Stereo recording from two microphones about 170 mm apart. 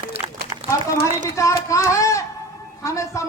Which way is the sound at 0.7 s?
20° left (ahead or behind).